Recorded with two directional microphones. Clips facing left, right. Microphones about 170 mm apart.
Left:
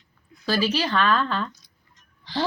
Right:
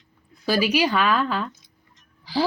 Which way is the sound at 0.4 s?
15° right (ahead or behind).